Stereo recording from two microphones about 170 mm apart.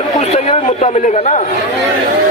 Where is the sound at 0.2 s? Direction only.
40° left (ahead or behind).